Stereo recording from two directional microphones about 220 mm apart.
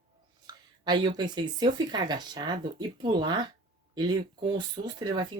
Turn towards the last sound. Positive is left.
turn(degrees=-20)  # may be behind; listen again after turning